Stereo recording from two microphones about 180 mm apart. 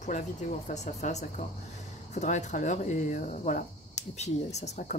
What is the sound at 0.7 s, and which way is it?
Speech, 45° left (ahead or behind).